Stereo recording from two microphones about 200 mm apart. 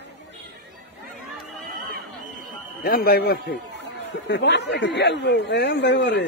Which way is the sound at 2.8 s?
50° left (ahead or behind).